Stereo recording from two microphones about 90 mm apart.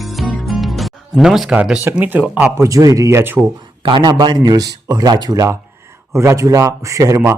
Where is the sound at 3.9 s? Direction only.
65° right (ahead or behind).